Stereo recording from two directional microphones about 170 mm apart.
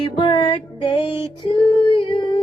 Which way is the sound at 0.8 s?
30° left (ahead or behind).